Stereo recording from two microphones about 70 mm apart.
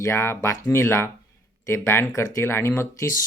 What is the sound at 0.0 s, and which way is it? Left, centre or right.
Speech, left.